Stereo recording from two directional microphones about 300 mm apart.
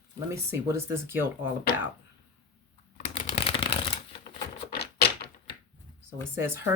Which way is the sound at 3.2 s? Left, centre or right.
Centre.